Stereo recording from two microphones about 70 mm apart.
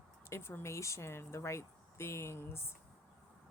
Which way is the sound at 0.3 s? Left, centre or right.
Left.